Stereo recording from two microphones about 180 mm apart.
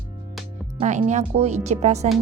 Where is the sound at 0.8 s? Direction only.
40° right (ahead or behind).